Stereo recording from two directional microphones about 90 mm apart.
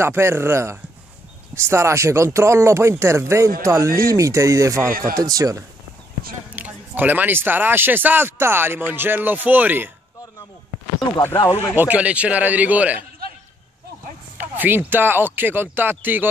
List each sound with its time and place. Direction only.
0.0 s speech: 30° right (ahead or behind)
6.5 s speech: 20° right (ahead or behind)
11.3 s speech: 65° left (ahead or behind)
11.7 s a man's voice: 20° right (ahead or behind)
14.4 s speech: 20° right (ahead or behind)